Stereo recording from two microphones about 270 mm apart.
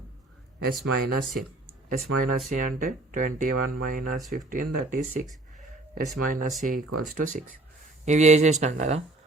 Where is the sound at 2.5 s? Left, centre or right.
Right.